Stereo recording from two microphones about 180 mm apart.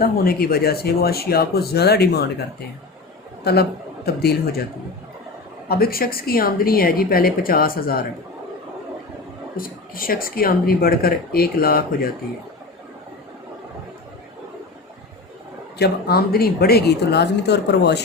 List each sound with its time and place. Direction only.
0.0 s a woman's voice: 55° left (ahead or behind)
3.4 s speech: 60° left (ahead or behind)
5.6 s a woman's voice: 60° left (ahead or behind)
9.6 s a woman's voice: 55° left (ahead or behind)
15.8 s a woman's voice: 60° left (ahead or behind)